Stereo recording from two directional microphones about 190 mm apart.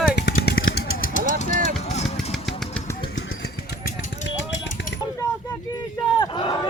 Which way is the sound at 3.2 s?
60° left (ahead or behind).